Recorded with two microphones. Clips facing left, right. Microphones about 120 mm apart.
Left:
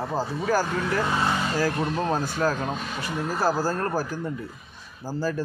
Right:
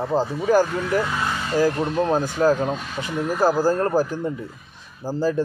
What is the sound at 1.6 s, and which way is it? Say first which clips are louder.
Speech: right 5 dB; 15° right (ahead or behind).